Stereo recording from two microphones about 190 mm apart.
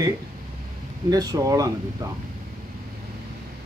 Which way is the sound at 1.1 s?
20° right (ahead or behind).